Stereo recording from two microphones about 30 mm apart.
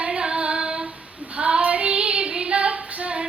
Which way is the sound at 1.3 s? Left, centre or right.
Right.